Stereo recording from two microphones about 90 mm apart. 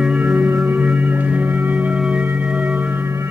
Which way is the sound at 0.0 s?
15° right (ahead or behind).